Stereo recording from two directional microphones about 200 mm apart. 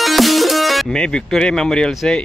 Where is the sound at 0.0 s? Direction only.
Centre (ahead or behind).